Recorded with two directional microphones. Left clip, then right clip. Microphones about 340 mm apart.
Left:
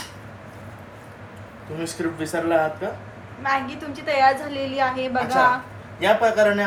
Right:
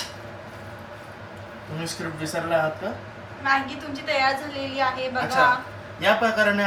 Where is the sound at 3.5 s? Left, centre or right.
Centre.